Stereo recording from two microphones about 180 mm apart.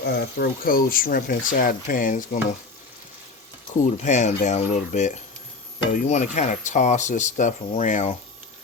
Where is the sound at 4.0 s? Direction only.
40° left (ahead or behind).